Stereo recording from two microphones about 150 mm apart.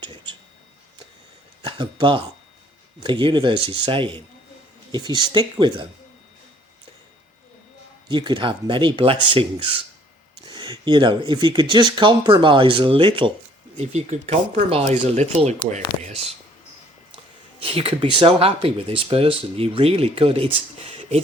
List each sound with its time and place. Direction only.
0.0 s a sound: 30° right (ahead or behind)
1.6 s speech: 30° right (ahead or behind)
8.1 s speech: 30° right (ahead or behind)
13.7 s speech: 45° right (ahead or behind)
17.6 s speech: 40° right (ahead or behind)